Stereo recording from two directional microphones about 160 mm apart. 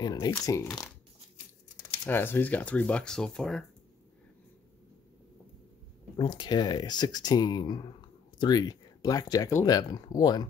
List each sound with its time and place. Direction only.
0.0 s speech: 25° left (ahead or behind)
2.0 s speech: 10° left (ahead or behind)
6.1 s speech: 30° left (ahead or behind)